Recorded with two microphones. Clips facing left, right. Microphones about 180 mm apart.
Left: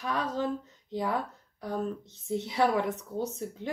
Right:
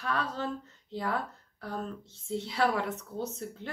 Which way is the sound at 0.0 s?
15° left (ahead or behind).